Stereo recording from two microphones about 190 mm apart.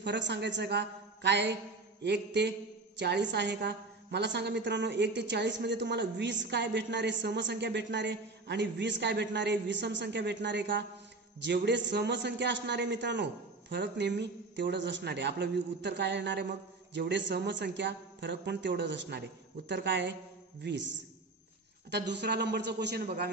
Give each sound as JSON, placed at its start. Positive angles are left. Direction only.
{"t": 0.0, "sound": "a woman's voice", "side_deg": -65}
{"t": 22.1, "sound": "a woman's voice", "side_deg": -60}